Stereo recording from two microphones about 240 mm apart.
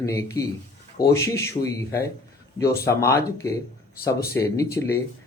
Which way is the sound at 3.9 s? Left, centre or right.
Left.